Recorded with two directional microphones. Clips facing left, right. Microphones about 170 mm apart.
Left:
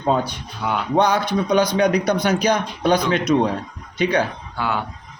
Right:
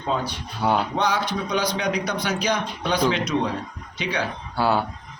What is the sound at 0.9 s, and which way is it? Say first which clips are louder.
Speech: left 6 dB; 50° left (ahead or behind).